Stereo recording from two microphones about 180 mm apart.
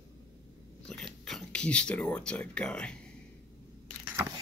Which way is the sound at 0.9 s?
Centre (ahead or behind).